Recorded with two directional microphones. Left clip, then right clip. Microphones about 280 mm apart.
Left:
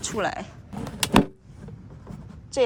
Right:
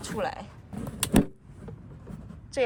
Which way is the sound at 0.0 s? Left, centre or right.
Left.